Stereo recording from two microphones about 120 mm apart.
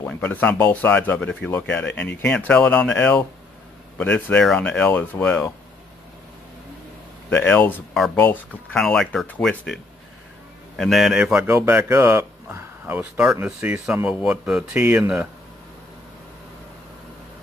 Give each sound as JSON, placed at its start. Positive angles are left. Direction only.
{"t": 0.0, "sound": "speech", "side_deg": 15}
{"t": 7.2, "sound": "speech", "side_deg": 15}
{"t": 8.7, "sound": "speech", "side_deg": 5}
{"t": 10.8, "sound": "speech", "side_deg": 0}
{"t": 11.4, "sound": "speech", "side_deg": -20}